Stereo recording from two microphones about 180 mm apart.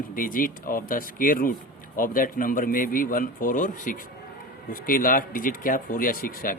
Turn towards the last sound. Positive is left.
turn(degrees=50)  # may be behind; listen again after turning